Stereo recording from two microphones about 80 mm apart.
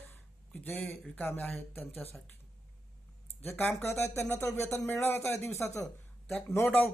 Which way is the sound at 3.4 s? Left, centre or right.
Left.